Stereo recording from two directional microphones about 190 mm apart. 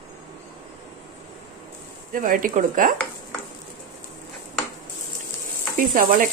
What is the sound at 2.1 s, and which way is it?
Speech, 45° right (ahead or behind).